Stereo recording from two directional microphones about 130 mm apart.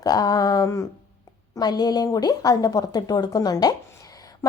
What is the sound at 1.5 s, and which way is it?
A woman's voice, 30° left (ahead or behind).